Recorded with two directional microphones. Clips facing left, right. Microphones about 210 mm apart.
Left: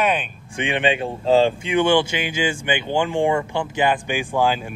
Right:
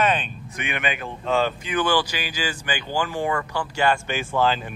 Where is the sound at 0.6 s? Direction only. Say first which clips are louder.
Left 8 dB; 30° left (ahead or behind).